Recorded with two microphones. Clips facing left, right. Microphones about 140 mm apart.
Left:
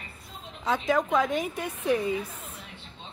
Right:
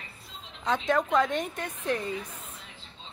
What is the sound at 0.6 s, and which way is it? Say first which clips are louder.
A woman's voice: left 1 dB; 5° left (ahead or behind).